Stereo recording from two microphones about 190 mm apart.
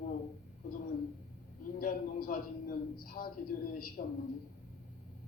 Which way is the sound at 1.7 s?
50° left (ahead or behind).